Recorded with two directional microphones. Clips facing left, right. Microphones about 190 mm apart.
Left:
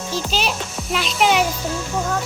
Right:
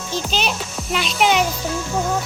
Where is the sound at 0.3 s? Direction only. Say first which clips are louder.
Even; 5° left (ahead or behind).